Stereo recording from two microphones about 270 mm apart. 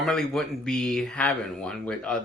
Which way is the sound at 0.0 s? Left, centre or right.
Centre.